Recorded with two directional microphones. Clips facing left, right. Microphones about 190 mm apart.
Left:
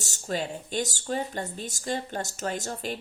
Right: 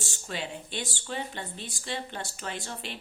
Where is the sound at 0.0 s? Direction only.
40° left (ahead or behind).